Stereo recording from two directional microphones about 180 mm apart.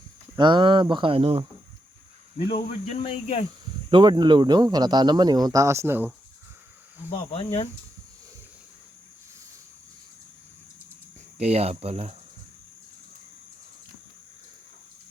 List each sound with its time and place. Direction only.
0.3 s speech: 25° right (ahead or behind)
2.8 s speech: 35° left (ahead or behind)
3.9 s speech: 25° right (ahead or behind)
7.1 s speech: 30° left (ahead or behind)
11.3 s speech: 35° right (ahead or behind)